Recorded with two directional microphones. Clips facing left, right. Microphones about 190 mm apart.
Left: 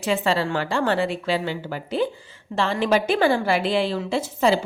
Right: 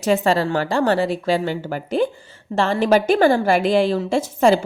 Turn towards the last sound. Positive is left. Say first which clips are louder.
# right 4 dB
turn(degrees=-50)  # may be behind; listen again after turning